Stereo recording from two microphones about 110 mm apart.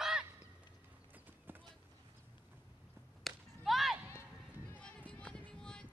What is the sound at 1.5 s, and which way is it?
Clip-clop, 20° right (ahead or behind).